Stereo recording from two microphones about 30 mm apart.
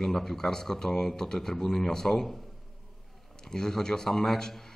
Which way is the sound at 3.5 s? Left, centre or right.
Centre.